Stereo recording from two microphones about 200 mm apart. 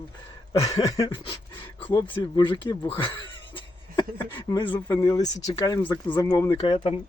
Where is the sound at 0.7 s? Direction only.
20° left (ahead or behind).